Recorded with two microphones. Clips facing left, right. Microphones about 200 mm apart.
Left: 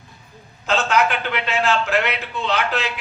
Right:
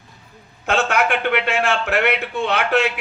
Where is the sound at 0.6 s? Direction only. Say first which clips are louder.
Even; 65° right (ahead or behind).